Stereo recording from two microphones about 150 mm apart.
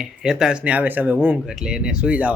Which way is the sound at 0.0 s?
5° right (ahead or behind).